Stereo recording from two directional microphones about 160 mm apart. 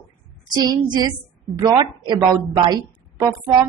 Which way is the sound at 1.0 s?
20° right (ahead or behind).